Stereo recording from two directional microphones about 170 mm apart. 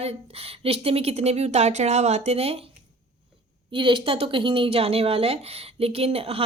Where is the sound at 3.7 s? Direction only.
30° right (ahead or behind).